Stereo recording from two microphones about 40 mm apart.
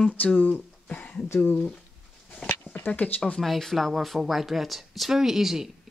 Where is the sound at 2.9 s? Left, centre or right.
Left.